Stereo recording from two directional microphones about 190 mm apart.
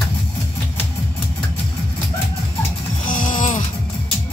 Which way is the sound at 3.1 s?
45° left (ahead or behind).